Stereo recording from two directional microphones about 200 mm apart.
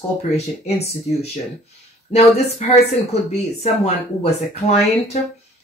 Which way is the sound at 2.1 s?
30° left (ahead or behind).